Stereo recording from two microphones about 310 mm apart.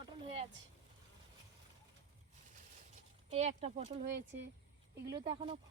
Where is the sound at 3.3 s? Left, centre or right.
Right.